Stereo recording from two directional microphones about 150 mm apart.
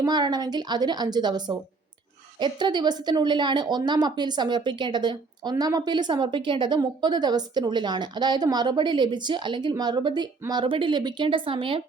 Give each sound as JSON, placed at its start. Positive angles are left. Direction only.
{"t": 0.0, "sound": "a woman's voice", "side_deg": -30}